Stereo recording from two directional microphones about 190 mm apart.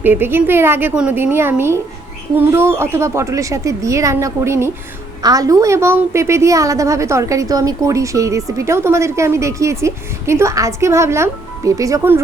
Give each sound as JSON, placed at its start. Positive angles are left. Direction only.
{"t": 0.0, "sound": "a woman's voice", "side_deg": -10}